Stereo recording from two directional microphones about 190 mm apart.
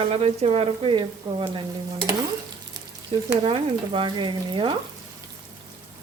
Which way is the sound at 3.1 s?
30° right (ahead or behind).